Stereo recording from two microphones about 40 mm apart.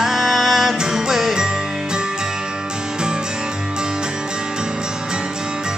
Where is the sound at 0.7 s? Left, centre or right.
Centre.